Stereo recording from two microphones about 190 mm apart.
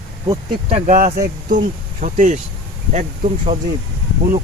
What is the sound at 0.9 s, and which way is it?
Speech, 50° right (ahead or behind).